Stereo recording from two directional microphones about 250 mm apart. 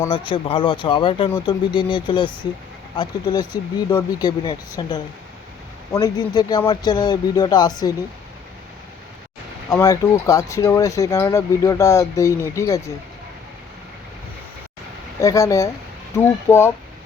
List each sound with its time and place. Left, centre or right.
0.1 s speech: left
9.6 s speech: centre
15.2 s speech: centre